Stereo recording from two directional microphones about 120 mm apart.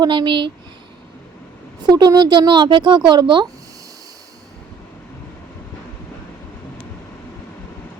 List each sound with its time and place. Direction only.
0.0 s speech: 40° right (ahead or behind)
1.9 s a child's voice: 35° right (ahead or behind)